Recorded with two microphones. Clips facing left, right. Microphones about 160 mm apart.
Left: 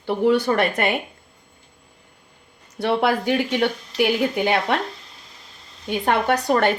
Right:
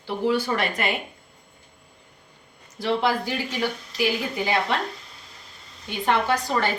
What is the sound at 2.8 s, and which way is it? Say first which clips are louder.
A woman's voice: left 3 dB; 60° left (ahead or behind).